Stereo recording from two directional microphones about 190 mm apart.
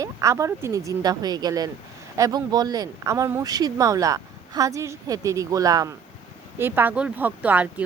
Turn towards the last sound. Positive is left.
turn(degrees=-10)  # may be behind; listen again after turning